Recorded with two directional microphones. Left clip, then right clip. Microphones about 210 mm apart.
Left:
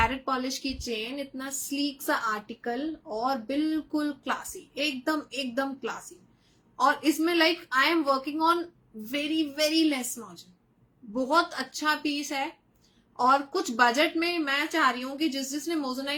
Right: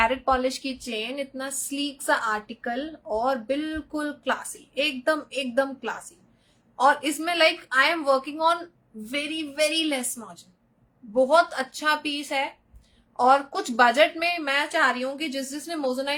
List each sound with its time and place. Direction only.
0.0 s a woman's voice: 15° right (ahead or behind)